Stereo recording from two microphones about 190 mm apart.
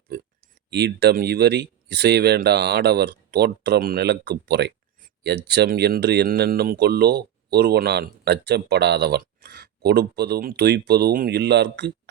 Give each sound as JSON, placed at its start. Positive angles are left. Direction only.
{"t": 0.7, "sound": "speech", "side_deg": -60}